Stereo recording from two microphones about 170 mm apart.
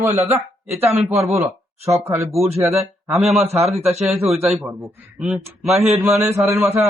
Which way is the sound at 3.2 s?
Centre (ahead or behind).